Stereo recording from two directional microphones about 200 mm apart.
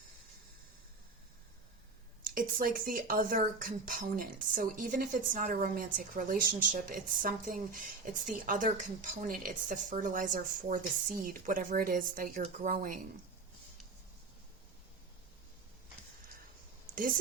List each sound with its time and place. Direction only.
2.2 s speech: 45° right (ahead or behind)
16.9 s speech: 45° right (ahead or behind)